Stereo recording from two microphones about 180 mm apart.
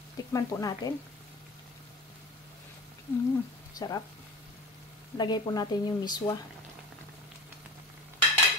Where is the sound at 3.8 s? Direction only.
20° left (ahead or behind).